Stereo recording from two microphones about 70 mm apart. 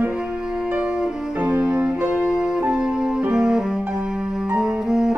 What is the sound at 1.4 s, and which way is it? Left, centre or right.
Music, centre.